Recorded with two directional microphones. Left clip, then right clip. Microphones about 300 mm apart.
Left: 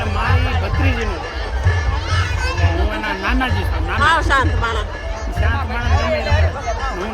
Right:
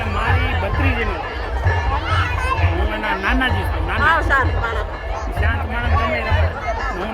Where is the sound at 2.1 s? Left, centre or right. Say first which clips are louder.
Right 1 dB; centre.